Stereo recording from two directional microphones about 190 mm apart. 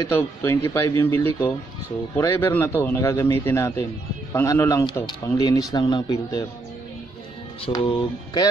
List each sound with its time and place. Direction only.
0.0 s speech: 15° left (ahead or behind)
7.8 s speech: 25° left (ahead or behind)